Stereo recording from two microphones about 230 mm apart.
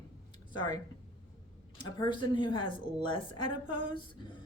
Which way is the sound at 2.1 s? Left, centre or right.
Left.